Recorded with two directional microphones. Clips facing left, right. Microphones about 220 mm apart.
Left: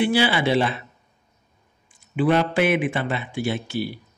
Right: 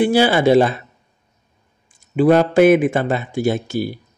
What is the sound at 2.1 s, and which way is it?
Speech, 40° right (ahead or behind).